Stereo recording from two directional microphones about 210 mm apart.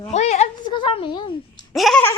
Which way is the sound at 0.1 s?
30° left (ahead or behind).